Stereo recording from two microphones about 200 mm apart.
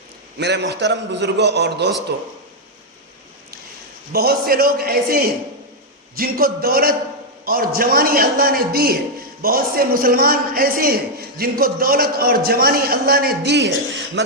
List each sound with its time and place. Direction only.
0.3 s a man's voice: 60° right (ahead or behind)
4.1 s a man's voice: 50° right (ahead or behind)